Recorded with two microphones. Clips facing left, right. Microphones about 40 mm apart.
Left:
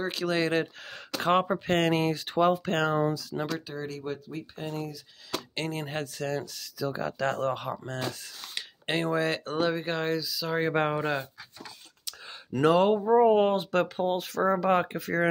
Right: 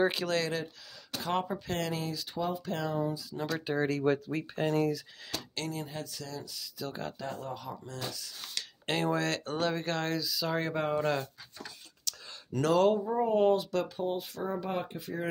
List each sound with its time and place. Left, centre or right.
0.2 s speech: centre
1.2 s speech: left
3.6 s speech: right
4.0 s speech: right
5.5 s speech: left
5.8 s speech: left
7.2 s speech: left
8.5 s speech: centre
10.7 s speech: left
11.0 s speech: centre
12.0 s a sound: left
13.1 s speech: left
14.1 s speech: left